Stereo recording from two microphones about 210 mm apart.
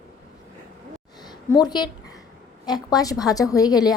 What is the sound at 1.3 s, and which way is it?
A woman's voice, 20° left (ahead or behind).